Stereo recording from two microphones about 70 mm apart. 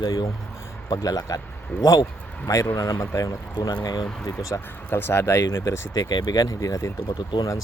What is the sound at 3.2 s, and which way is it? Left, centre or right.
Speech, left.